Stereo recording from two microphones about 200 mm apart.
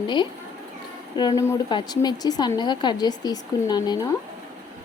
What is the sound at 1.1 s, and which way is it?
A woman's voice, 20° left (ahead or behind).